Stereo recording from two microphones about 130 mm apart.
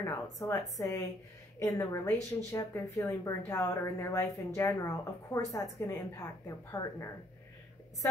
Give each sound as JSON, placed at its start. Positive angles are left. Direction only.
{"t": 0.0, "sound": "speech", "side_deg": 25}